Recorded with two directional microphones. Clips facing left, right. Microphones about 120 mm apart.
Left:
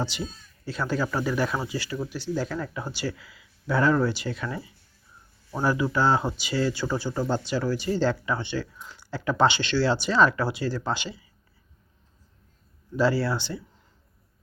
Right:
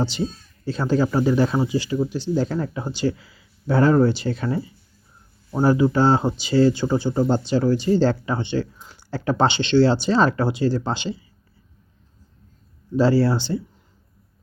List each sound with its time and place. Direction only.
0.0 s speech: 30° right (ahead or behind)
13.0 s speech: 30° right (ahead or behind)